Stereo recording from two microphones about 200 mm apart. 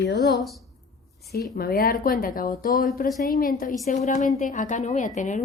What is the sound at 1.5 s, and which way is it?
A woman's voice, 45° left (ahead or behind).